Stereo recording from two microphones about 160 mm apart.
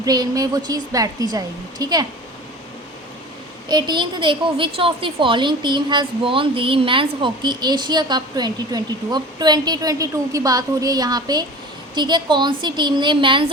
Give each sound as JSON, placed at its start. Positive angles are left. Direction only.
{"t": 0.0, "sound": "a woman's voice", "side_deg": -25}
{"t": 3.7, "sound": "a woman's voice", "side_deg": -25}